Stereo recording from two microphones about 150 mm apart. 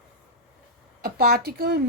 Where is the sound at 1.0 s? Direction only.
90° right.